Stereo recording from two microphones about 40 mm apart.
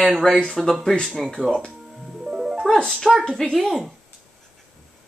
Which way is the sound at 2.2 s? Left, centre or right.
Centre.